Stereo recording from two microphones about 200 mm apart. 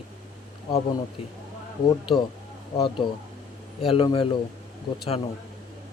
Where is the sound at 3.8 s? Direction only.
25° left (ahead or behind).